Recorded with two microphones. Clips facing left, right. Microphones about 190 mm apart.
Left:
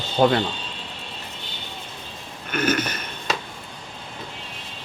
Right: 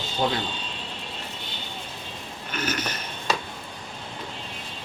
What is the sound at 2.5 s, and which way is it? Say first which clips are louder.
Speech: left 7 dB; 55° left (ahead or behind).